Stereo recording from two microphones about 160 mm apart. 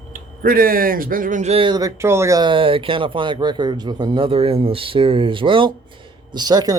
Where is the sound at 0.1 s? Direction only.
60° right (ahead or behind).